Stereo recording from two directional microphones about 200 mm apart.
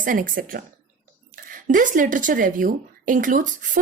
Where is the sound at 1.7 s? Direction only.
40° right (ahead or behind).